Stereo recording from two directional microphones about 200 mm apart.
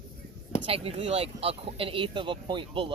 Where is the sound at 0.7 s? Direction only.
30° right (ahead or behind).